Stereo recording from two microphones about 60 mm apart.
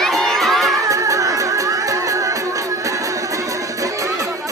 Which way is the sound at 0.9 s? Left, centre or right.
Right.